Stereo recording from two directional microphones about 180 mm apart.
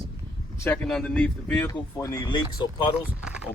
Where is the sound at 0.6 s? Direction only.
5° left (ahead or behind).